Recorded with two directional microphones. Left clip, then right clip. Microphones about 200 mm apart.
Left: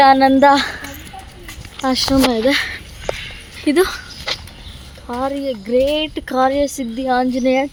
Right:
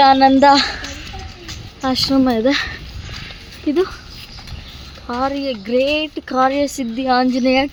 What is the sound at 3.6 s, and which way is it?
Speech, 10° left (ahead or behind).